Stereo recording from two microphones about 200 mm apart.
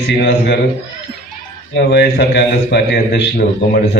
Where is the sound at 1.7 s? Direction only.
55° left (ahead or behind).